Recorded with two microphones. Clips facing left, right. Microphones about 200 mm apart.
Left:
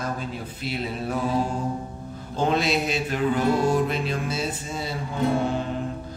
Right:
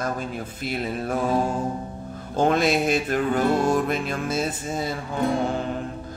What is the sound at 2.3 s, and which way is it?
Mantra, 50° right (ahead or behind).